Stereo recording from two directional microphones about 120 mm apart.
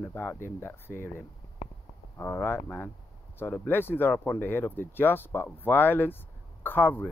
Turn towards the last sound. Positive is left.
turn(degrees=15)  # may be behind; listen again after turning